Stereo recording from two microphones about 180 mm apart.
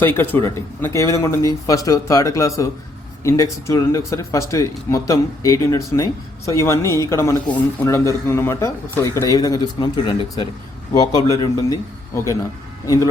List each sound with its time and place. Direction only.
0.0 s a man's voice: 10° left (ahead or behind)